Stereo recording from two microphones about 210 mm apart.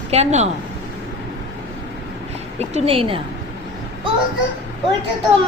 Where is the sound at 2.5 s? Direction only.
30° right (ahead or behind).